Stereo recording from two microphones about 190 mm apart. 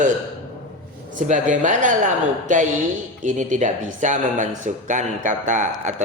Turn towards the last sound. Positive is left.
turn(degrees=-40)  # may be behind; listen again after turning